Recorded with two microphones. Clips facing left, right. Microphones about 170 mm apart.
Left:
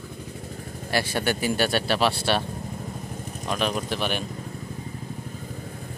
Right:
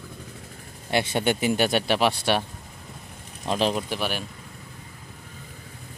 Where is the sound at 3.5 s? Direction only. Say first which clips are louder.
Right 3 dB; 25° right (ahead or behind).